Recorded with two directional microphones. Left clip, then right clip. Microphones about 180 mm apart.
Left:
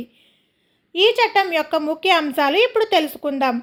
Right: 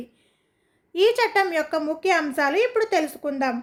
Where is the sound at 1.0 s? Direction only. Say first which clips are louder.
Left 3 dB; 15° left (ahead or behind).